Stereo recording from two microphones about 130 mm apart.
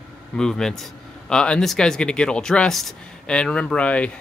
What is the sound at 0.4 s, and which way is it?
Speech, 5° left (ahead or behind).